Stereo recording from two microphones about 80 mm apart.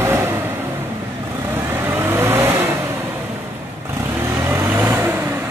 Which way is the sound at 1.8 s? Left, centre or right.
Right.